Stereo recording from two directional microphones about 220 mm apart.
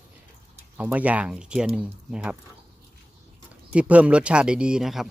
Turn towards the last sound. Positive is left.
turn(degrees=0)  # may be behind; listen again after turning